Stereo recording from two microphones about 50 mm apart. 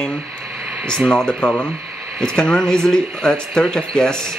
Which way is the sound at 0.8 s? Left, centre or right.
Centre.